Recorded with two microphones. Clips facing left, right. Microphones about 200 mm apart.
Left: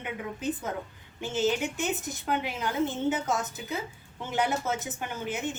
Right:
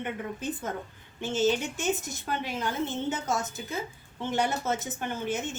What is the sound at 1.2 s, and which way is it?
A woman's voice, 15° left (ahead or behind).